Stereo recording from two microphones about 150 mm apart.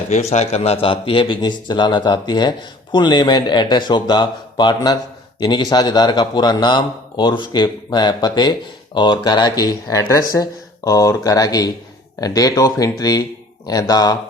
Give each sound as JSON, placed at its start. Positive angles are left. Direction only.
{"t": 0.1, "sound": "a man's voice", "side_deg": 50}